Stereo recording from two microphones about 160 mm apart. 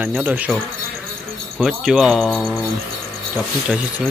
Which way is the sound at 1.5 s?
Centre (ahead or behind).